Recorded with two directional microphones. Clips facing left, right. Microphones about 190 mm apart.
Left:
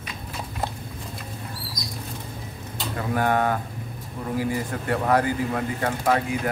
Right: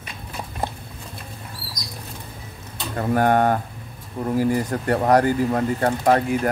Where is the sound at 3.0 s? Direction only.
45° right (ahead or behind).